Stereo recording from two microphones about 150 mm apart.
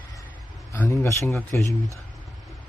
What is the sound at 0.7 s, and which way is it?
Speech, 20° left (ahead or behind).